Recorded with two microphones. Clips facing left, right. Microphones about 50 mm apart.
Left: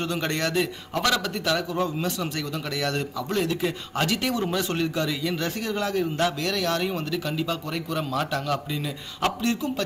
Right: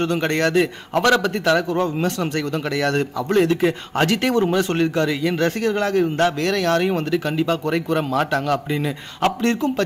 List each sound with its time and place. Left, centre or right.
0.0 s speech: right